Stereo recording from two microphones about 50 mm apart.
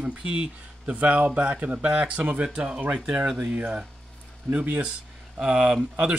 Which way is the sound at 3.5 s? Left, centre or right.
Right.